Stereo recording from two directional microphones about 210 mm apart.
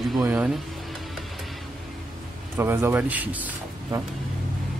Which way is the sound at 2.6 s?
10° right (ahead or behind).